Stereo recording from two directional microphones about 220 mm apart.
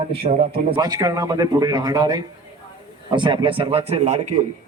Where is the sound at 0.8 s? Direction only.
15° right (ahead or behind).